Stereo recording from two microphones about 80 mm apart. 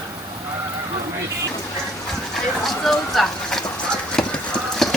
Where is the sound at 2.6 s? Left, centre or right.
Centre.